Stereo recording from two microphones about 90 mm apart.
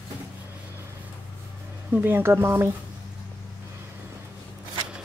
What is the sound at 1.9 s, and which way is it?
Speech, 25° right (ahead or behind).